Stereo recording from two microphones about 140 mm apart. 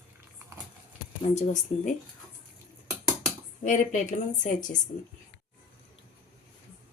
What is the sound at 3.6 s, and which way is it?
Speech, 65° left (ahead or behind).